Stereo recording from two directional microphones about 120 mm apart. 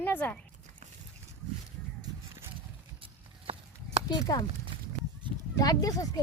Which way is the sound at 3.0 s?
50° right (ahead or behind).